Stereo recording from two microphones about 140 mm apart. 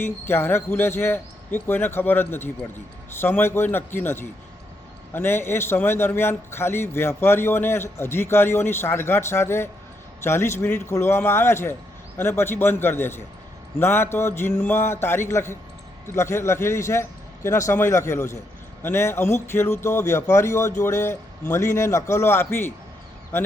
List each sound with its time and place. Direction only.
0.0 s a man's voice: 15° left (ahead or behind)